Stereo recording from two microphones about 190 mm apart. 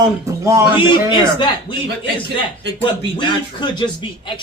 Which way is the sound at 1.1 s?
25° left (ahead or behind).